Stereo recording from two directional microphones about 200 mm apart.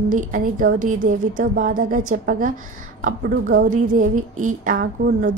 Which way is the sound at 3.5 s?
40° right (ahead or behind).